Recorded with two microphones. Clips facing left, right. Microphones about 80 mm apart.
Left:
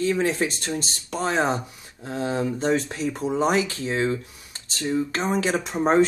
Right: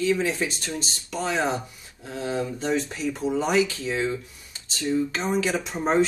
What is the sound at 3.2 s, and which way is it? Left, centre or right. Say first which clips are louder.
Speech: even; left.